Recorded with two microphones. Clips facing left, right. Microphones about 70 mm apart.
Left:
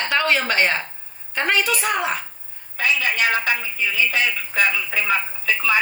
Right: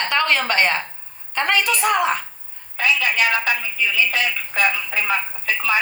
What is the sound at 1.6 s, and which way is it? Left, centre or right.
Speech, right.